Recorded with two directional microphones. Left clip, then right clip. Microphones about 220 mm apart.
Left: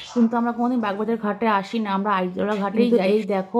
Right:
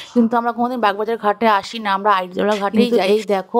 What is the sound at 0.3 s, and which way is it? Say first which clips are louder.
Speech: right 5 dB; 45° right (ahead or behind).